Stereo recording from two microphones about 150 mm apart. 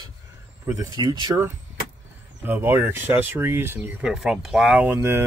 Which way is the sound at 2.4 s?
15° right (ahead or behind).